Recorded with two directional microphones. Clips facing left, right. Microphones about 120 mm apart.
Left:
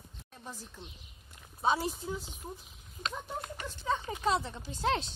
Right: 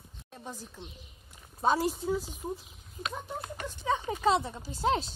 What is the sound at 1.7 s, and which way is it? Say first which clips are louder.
Speech: right 5 dB; centre (ahead or behind).